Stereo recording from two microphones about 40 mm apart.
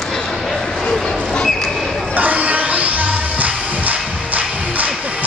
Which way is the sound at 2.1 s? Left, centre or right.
Right.